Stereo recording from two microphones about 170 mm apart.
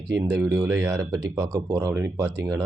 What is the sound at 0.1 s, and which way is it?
A man's voice, 15° right (ahead or behind).